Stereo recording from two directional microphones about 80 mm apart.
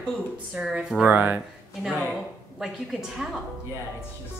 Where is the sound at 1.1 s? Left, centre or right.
Right.